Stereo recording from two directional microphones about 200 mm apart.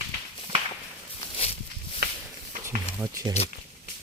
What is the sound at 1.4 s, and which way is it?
Walk, 30° left (ahead or behind).